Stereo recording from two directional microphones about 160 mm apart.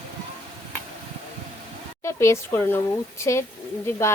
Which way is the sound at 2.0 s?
15° left (ahead or behind).